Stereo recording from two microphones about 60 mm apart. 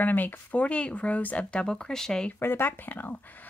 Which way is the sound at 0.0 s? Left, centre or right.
Left.